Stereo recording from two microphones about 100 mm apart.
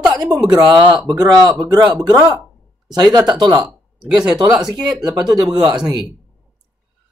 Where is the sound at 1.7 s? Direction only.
40° right (ahead or behind).